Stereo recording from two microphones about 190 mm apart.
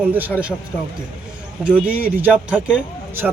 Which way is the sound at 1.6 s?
5° right (ahead or behind).